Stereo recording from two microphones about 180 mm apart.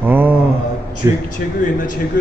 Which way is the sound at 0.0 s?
10° right (ahead or behind).